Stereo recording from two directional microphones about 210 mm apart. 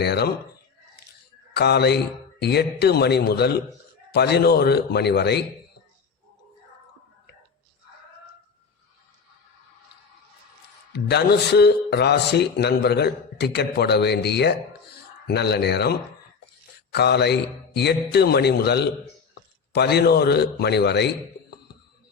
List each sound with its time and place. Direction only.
0.0 s a man's voice: 50° left (ahead or behind)
1.5 s a man's voice: 50° left (ahead or behind)
10.9 s a man's voice: 50° left (ahead or behind)